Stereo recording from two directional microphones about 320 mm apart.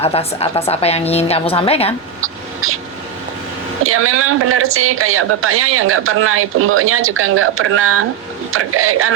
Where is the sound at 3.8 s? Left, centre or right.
Right.